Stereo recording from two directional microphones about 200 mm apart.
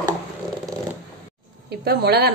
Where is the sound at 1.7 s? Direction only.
55° right (ahead or behind).